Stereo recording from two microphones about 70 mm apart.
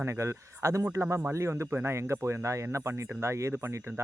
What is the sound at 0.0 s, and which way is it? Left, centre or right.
Speech, right.